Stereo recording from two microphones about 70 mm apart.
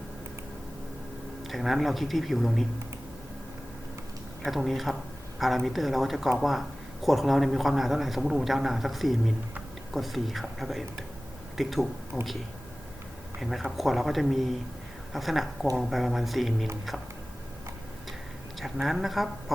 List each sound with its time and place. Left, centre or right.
1.5 s a man's voice: centre
4.4 s a man's voice: centre
13.4 s a man's voice: centre
18.6 s a man's voice: centre